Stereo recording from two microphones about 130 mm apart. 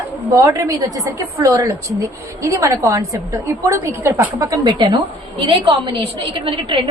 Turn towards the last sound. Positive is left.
turn(degrees=-40)  # may be behind; listen again after turning